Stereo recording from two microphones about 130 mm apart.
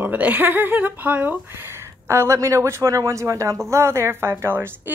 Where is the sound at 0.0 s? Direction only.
15° right (ahead or behind).